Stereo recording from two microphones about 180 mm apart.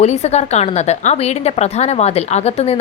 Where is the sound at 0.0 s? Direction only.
35° left (ahead or behind).